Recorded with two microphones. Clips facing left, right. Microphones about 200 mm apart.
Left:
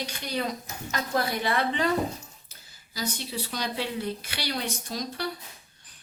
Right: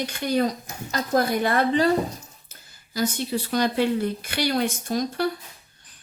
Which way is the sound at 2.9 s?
50° right (ahead or behind).